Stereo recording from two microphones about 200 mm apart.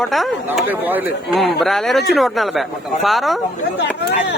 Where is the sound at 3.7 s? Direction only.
60° left (ahead or behind).